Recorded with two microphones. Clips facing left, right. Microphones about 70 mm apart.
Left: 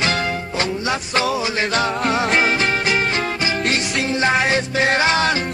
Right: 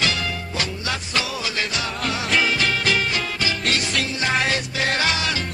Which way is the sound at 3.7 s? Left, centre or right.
Left.